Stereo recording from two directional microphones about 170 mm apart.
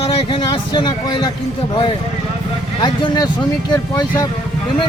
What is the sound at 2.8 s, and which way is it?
Speech, 25° left (ahead or behind).